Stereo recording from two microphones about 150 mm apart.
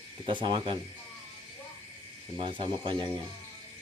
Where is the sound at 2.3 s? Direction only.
35° right (ahead or behind).